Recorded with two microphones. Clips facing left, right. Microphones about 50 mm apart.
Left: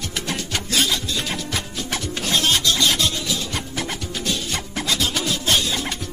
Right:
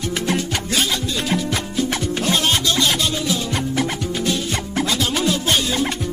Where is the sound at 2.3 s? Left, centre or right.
Centre.